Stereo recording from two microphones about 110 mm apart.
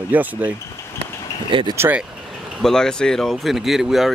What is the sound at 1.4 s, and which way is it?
Speech, 50° right (ahead or behind).